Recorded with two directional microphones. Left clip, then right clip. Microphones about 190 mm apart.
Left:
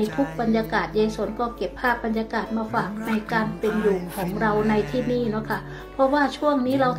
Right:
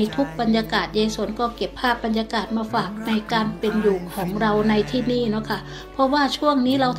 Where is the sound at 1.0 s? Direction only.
30° right (ahead or behind).